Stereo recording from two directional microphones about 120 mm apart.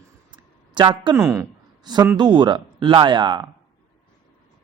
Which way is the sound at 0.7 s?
40° right (ahead or behind).